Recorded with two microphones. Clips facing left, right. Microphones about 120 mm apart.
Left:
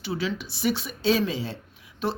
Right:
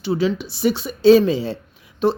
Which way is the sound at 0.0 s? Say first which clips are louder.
Right 9 dB; 30° right (ahead or behind).